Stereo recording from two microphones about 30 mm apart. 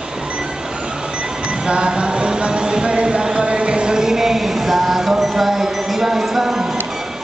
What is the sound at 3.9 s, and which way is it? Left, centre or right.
Music, centre.